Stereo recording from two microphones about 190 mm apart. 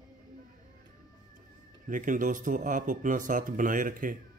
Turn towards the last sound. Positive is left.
turn(degrees=-45)  # may be behind; listen again after turning